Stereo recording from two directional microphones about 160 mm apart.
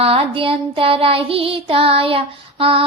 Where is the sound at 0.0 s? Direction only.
35° right (ahead or behind).